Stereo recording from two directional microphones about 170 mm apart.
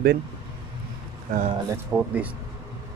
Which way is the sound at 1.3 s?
50° right (ahead or behind).